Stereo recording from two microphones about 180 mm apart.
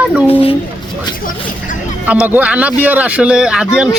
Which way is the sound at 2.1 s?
10° right (ahead or behind).